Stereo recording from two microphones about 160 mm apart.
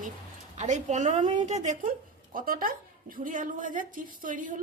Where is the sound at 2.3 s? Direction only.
60° right (ahead or behind).